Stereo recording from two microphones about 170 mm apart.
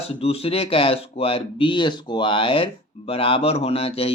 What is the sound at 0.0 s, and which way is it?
Speech, 35° left (ahead or behind).